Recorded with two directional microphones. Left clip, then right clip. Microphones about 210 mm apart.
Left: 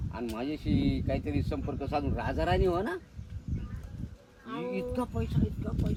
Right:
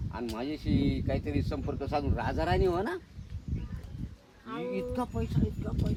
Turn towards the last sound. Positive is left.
turn(degrees=-5)  # may be behind; listen again after turning